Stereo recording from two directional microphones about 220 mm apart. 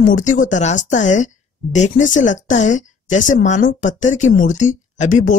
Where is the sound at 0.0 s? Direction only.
35° left (ahead or behind).